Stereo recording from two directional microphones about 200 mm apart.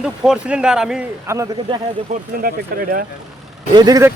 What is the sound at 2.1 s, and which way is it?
Speech, 35° right (ahead or behind).